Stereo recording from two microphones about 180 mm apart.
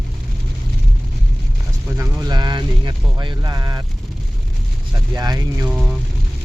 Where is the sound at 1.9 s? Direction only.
15° right (ahead or behind).